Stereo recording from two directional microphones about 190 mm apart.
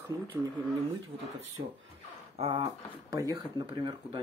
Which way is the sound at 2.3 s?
30° right (ahead or behind).